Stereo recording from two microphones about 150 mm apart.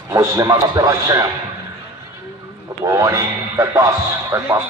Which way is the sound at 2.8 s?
20° right (ahead or behind).